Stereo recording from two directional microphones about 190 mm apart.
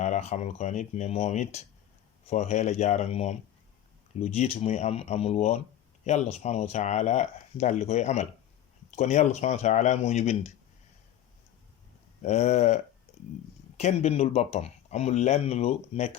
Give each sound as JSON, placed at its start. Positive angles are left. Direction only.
{"t": 0.0, "sound": "speech", "side_deg": 35}
{"t": 12.2, "sound": "speech", "side_deg": 35}
{"t": 13.1, "sound": "a sound", "side_deg": 35}
{"t": 13.7, "sound": "speech", "side_deg": 35}